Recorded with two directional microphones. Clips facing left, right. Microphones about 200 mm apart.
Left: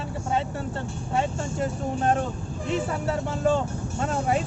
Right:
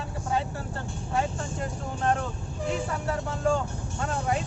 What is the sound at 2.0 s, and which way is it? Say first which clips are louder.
Speech: left 2 dB; 25° left (ahead or behind).